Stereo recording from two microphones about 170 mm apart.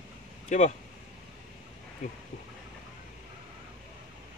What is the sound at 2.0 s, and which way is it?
Speech, 45° left (ahead or behind).